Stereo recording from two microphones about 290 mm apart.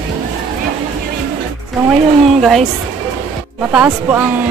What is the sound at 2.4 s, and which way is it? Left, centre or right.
Speech, centre.